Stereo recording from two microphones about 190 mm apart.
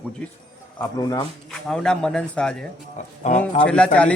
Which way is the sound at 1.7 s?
5° left (ahead or behind).